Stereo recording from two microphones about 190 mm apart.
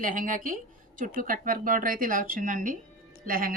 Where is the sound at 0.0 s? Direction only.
45° right (ahead or behind).